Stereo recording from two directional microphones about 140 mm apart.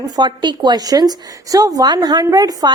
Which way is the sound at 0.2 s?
30° right (ahead or behind).